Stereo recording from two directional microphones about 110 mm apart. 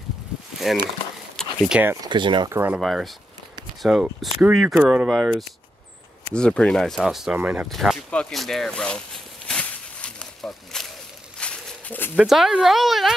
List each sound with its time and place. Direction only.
0.7 s speech: centre (ahead or behind)
1.7 s speech: 15° right (ahead or behind)
2.0 s speech: 45° right (ahead or behind)
2.5 s speech: 15° right (ahead or behind)
2.8 s speech: centre (ahead or behind)
6.3 s speech: 10° left (ahead or behind)
7.3 s speech: 15° right (ahead or behind)
7.7 s speech: centre (ahead or behind)
9.5 s a sound: 10° left (ahead or behind)
12.2 s speech: 5° right (ahead or behind)